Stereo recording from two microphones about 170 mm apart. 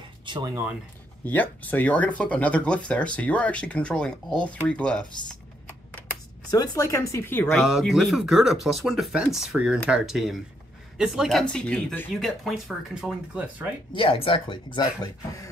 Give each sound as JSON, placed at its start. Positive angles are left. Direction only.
{"t": 0.2, "sound": "a sound", "side_deg": -30}
{"t": 1.2, "sound": "speech", "side_deg": 10}
{"t": 6.5, "sound": "speech", "side_deg": 20}
{"t": 7.5, "sound": "speech", "side_deg": 0}
{"t": 13.9, "sound": "speech", "side_deg": 30}